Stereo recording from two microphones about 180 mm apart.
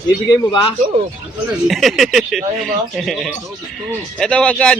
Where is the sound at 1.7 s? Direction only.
Centre (ahead or behind).